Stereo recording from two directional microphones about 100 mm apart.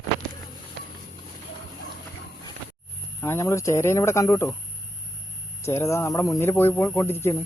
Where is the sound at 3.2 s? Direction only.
30° left (ahead or behind).